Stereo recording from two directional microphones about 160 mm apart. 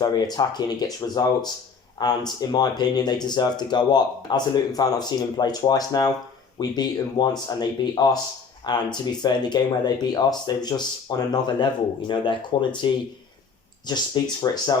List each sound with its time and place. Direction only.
0.0 s speech: 25° left (ahead or behind)